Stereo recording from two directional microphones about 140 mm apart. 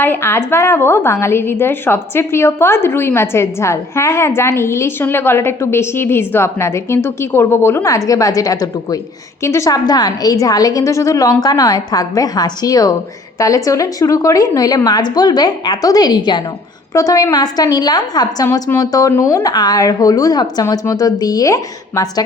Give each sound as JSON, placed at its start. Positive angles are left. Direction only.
{"t": 0.0, "sound": "a woman's voice", "side_deg": 15}